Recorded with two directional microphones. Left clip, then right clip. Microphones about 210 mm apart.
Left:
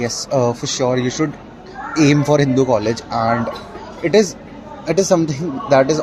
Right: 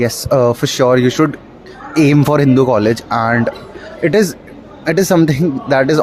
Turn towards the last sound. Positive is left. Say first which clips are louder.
# right 1 dB
turn(degrees=-45)  # may be behind; listen again after turning